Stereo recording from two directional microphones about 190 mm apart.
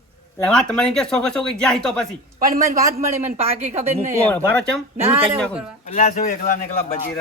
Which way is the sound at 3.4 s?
35° right (ahead or behind).